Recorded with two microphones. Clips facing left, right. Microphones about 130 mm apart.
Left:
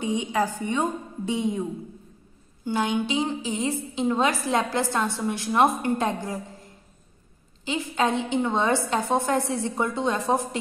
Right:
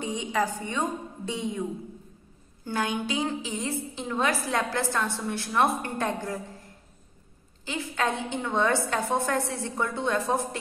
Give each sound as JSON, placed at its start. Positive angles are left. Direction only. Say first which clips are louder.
{"t": 0.0, "sound": "a woman's voice", "louder": "left 3 dB", "side_deg": 10}
{"t": 2.6, "sound": "a woman's voice", "louder": "left 4 dB", "side_deg": 20}
{"t": 7.6, "sound": "a woman's voice", "louder": "left 4 dB", "side_deg": 20}